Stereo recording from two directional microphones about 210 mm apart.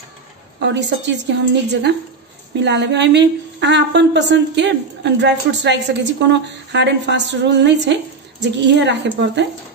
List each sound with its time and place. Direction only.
0.6 s a woman's voice: 55° right (ahead or behind)